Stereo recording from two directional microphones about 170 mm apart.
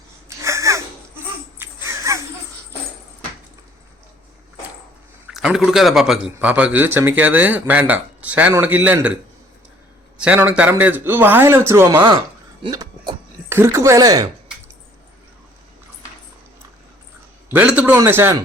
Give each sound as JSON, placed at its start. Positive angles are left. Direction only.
{"t": 0.3, "sound": "a sound", "side_deg": -15}
{"t": 5.3, "sound": "a man's voice", "side_deg": 0}
{"t": 10.2, "sound": "a man's voice", "side_deg": -10}
{"t": 17.5, "sound": "a man's voice", "side_deg": -10}